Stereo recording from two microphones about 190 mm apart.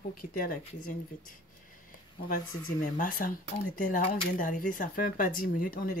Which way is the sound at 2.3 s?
45° left (ahead or behind).